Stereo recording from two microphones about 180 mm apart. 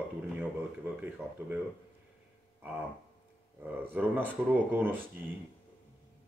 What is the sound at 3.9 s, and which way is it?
Speech, 10° right (ahead or behind).